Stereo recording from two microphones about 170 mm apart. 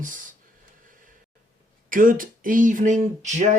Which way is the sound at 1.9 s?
55° right (ahead or behind).